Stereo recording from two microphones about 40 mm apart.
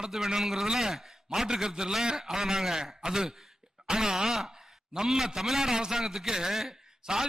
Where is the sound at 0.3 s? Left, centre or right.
Centre.